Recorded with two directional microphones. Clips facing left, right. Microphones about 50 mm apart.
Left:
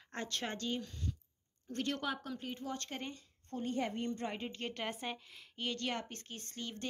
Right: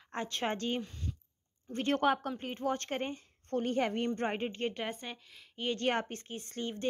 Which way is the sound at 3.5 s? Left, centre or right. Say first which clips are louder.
Right 6 dB; right.